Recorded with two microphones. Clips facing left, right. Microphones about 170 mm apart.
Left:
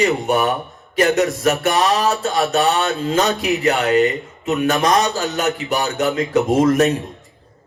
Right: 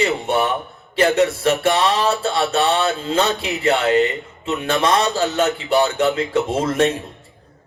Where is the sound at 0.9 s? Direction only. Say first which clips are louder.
Even; 30° right (ahead or behind).